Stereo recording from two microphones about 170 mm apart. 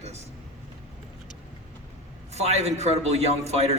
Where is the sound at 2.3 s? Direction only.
40° right (ahead or behind).